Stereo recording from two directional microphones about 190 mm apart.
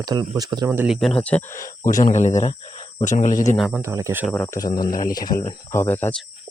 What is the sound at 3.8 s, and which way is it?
Speech, 15° right (ahead or behind).